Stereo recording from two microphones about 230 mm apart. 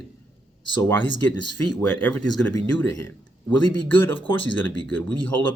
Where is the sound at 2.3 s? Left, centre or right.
Centre.